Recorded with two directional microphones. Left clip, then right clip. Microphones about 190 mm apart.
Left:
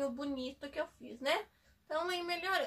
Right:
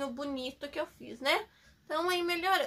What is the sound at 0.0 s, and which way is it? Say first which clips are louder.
Speech: right 2 dB; 30° right (ahead or behind).